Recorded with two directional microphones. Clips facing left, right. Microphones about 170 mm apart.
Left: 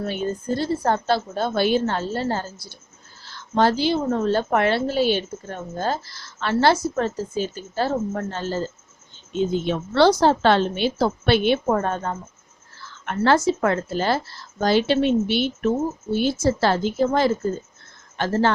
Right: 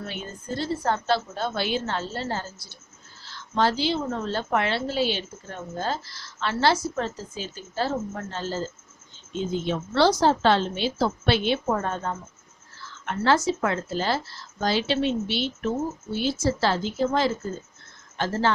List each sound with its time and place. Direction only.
0.0 s a woman's voice: 45° left (ahead or behind)
3.5 s a woman's voice: 50° left (ahead or behind)